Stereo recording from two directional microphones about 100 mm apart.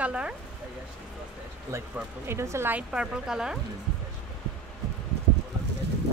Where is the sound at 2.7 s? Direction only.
5° right (ahead or behind).